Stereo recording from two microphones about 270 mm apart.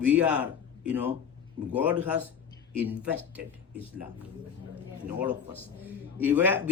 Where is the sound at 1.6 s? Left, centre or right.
Right.